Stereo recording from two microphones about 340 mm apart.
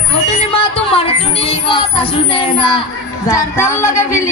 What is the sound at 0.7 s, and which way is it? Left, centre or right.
Music, centre.